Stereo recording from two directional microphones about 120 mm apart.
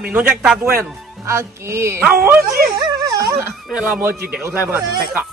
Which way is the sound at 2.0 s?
10° right (ahead or behind).